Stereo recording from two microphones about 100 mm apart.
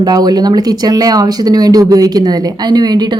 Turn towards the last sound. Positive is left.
turn(degrees=-45)  # may be behind; listen again after turning